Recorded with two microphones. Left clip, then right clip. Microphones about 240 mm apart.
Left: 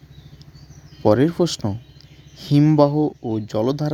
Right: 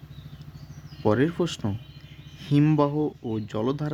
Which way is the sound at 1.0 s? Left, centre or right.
Left.